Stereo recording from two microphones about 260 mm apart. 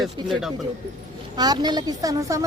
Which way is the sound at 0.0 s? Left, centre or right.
Centre.